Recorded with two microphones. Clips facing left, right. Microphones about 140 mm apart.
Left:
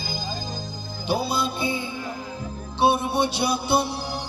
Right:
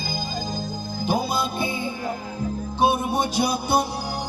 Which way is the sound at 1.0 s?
45° right (ahead or behind).